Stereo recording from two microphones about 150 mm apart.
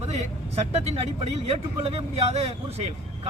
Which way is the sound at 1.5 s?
45° right (ahead or behind).